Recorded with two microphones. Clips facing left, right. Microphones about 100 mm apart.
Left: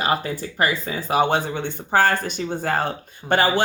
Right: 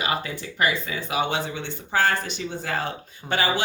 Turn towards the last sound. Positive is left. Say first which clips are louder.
# left 6 dB
turn(degrees=50)  # may be behind; listen again after turning